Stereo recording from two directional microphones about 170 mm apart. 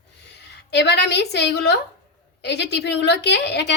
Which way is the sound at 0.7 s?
85° left.